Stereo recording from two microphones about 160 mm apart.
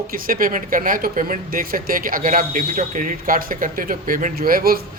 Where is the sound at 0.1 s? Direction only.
60° right (ahead or behind).